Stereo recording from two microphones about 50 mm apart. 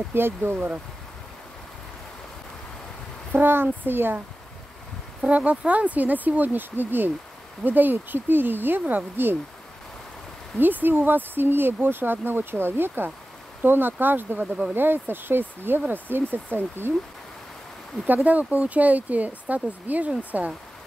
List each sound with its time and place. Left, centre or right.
0.1 s speech: right
3.3 s speech: right
5.2 s speech: right
10.6 s speech: right
14.4 s speech: right
14.8 s speech: right
18.0 s speech: right